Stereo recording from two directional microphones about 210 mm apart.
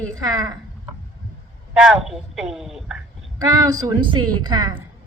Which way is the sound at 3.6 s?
20° right (ahead or behind).